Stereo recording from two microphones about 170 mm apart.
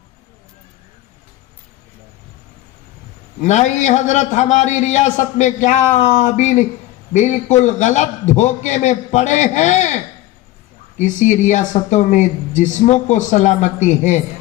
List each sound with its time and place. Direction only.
3.4 s a man's voice: 45° left (ahead or behind)
11.0 s a man's voice: 45° left (ahead or behind)